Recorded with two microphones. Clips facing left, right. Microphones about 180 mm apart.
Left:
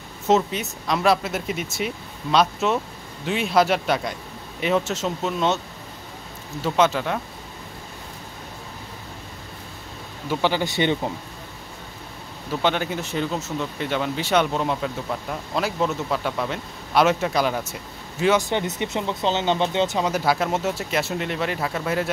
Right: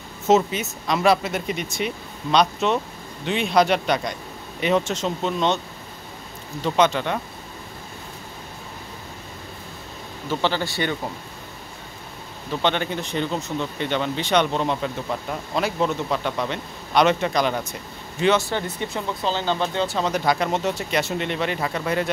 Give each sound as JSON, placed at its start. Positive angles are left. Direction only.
{"t": 0.3, "sound": "speech", "side_deg": 0}
{"t": 6.6, "sound": "speech", "side_deg": 5}
{"t": 10.2, "sound": "speech", "side_deg": 10}
{"t": 12.6, "sound": "speech", "side_deg": 5}
{"t": 18.5, "sound": "speech", "side_deg": 20}
{"t": 20.1, "sound": "speech", "side_deg": 5}